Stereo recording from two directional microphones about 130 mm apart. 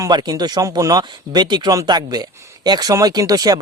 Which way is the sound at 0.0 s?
30° right (ahead or behind).